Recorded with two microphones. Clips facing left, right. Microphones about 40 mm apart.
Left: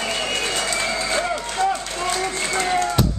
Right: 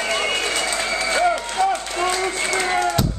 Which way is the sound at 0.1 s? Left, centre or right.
Right.